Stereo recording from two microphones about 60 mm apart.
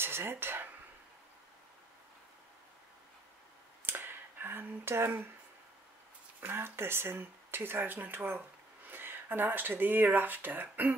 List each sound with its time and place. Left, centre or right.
0.0 s speech: right
3.8 s a sound: right
6.4 s speech: right